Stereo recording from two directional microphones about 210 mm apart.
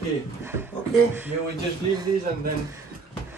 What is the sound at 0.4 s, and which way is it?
Speech, 10° right (ahead or behind).